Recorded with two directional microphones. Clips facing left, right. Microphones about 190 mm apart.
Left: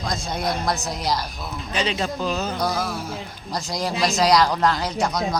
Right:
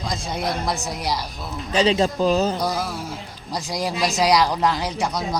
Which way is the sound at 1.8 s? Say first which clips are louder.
Right 7 dB; 35° right (ahead or behind).